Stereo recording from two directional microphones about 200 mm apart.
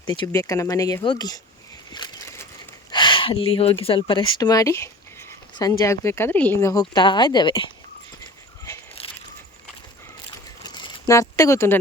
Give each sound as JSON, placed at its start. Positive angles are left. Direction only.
{"t": 0.0, "sound": "speech", "side_deg": 20}
{"t": 1.9, "sound": "a sound", "side_deg": 20}
{"t": 2.9, "sound": "speech", "side_deg": 25}
{"t": 10.6, "sound": "crumpling", "side_deg": 20}